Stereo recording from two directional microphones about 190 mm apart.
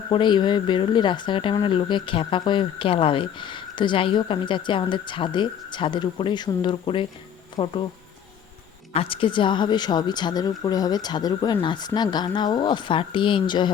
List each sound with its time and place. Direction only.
0.1 s speech: 25° left (ahead or behind)
8.9 s speech: 30° left (ahead or behind)